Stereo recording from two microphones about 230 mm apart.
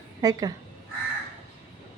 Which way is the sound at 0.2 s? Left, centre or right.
Centre.